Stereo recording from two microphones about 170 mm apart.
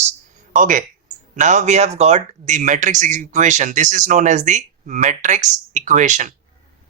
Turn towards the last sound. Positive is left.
turn(degrees=-45)  # may be behind; listen again after turning